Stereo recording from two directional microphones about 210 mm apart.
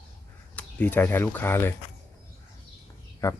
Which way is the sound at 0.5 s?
5° left (ahead or behind).